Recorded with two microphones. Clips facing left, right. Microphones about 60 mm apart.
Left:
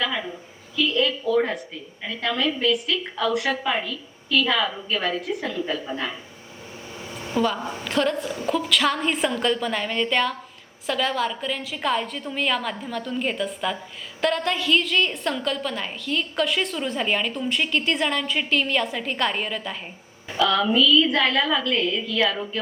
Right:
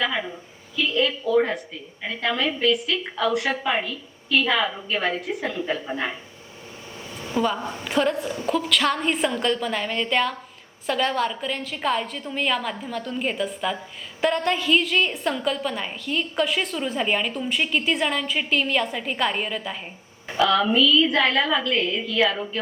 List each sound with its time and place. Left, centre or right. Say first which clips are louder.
0.0 s a woman's voice: right 1 dB; centre
0.9 s a sound: right 2 dB; centre
2.2 s a woman's voice: right 1 dB; centre
5.5 s a woman's voice: even; right
7.3 s a woman's voice: even; centre
7.6 s a woman's voice: even; centre
7.9 s a woman's voice: right 1 dB; centre